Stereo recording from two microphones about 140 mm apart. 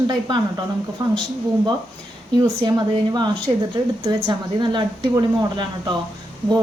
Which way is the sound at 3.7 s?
30° right (ahead or behind).